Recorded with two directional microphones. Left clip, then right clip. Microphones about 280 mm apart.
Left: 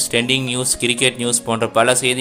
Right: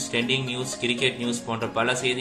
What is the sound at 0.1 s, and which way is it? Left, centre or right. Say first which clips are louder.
Speech: left 6 dB; left.